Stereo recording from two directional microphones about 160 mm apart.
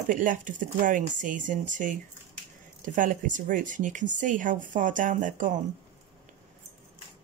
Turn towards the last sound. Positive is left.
turn(degrees=-55)  # may be behind; listen again after turning